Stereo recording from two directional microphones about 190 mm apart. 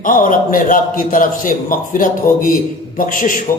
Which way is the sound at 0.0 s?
45° left (ahead or behind).